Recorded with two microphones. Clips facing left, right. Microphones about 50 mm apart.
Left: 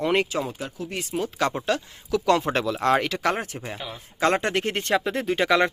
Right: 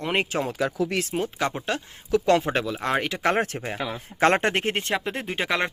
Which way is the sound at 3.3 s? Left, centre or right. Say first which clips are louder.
Right 4 dB; right.